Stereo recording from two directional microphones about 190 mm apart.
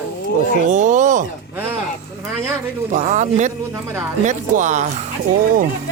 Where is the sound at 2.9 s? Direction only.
40° right (ahead or behind).